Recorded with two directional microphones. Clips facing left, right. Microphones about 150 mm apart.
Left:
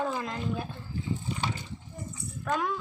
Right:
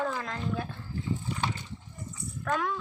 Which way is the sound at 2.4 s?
15° left (ahead or behind).